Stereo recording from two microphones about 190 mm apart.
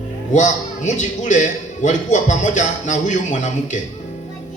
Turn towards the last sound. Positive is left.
turn(degrees=40)  # may be behind; listen again after turning